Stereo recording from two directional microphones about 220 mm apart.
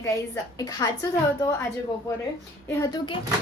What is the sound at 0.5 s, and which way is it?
Speech, 15° left (ahead or behind).